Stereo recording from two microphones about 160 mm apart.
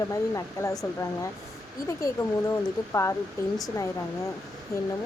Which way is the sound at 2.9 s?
20° left (ahead or behind).